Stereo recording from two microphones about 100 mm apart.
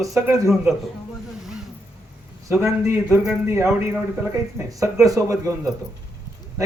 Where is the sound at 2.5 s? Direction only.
25° right (ahead or behind).